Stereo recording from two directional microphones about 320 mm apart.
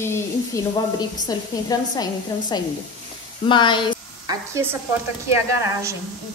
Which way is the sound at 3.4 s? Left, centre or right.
Centre.